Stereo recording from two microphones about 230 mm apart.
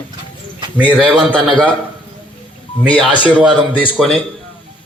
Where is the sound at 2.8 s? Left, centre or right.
Centre.